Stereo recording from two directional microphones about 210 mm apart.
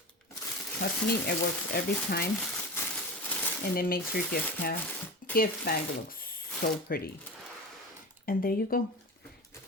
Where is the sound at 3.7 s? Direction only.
45° left (ahead or behind).